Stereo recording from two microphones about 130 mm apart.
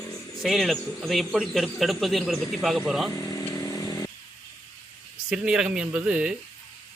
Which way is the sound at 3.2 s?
30° left (ahead or behind).